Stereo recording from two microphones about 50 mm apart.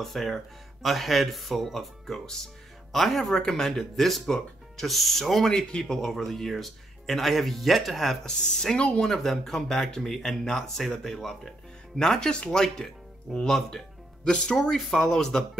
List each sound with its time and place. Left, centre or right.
0.0 s speech: centre
5.5 s speech: centre
8.3 s speech: centre